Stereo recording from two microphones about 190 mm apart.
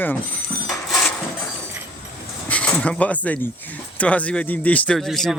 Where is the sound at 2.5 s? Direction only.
5° left (ahead or behind).